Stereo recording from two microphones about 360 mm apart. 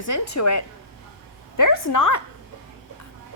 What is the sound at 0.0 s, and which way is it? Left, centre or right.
Speech, left.